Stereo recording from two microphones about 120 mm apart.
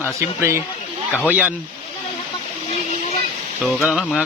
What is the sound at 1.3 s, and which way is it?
Speech, 10° right (ahead or behind).